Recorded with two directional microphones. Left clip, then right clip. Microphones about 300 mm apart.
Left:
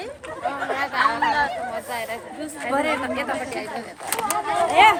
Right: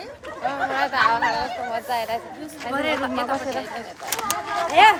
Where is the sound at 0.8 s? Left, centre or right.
Centre.